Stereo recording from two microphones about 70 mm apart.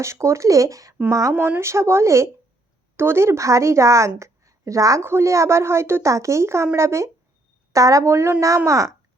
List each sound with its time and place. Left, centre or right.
0.0 s speech: right
1.3 s speech: right
4.2 s a sound: right
5.0 s speech: right